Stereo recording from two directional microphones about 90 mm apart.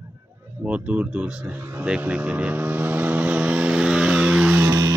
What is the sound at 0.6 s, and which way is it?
Speech, 15° right (ahead or behind).